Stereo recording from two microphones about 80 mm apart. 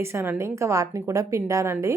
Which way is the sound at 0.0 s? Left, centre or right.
Right.